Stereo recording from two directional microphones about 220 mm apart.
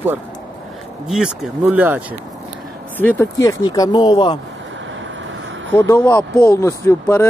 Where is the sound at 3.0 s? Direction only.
10° left (ahead or behind).